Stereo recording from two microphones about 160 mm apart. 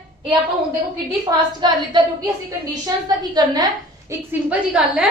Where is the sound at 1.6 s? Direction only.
25° right (ahead or behind).